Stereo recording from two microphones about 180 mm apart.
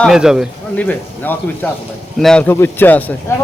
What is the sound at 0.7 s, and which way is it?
A man's voice, 10° left (ahead or behind).